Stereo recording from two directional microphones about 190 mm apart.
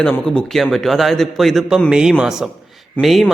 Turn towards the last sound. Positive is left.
turn(degrees=0)  # may be behind; listen again after turning